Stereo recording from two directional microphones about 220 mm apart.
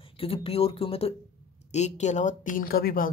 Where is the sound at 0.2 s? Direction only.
25° left (ahead or behind).